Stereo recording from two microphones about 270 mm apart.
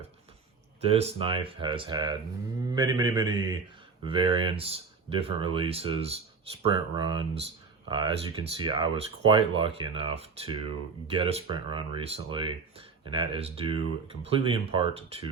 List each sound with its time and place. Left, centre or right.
0.8 s speech: right